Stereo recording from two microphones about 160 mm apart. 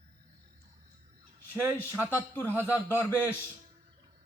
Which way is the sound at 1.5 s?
15° right (ahead or behind).